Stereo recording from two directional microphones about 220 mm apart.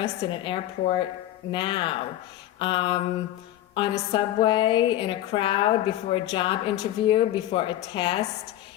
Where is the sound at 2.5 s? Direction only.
25° left (ahead or behind).